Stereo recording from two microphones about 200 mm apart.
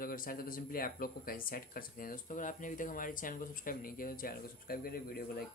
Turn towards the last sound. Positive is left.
turn(degrees=50)  # may be behind; listen again after turning